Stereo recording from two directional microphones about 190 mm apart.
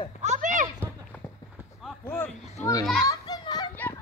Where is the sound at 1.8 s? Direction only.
5° left (ahead or behind).